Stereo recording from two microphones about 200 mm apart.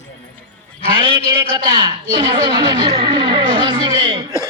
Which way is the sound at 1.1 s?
25° left (ahead or behind).